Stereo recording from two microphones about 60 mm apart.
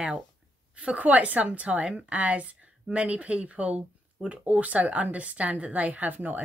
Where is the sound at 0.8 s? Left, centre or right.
Right.